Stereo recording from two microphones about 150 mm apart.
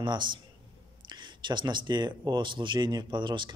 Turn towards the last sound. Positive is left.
turn(degrees=-30)  # may be behind; listen again after turning